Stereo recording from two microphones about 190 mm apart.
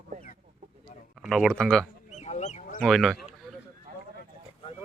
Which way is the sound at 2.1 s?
35° left (ahead or behind).